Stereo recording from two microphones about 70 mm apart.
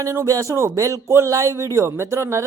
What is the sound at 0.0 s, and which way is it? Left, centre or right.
Speech, right.